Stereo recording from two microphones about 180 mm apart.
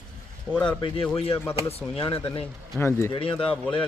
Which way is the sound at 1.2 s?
30° left (ahead or behind).